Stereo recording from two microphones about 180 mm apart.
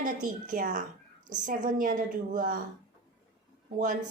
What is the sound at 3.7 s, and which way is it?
Speech, 45° right (ahead or behind).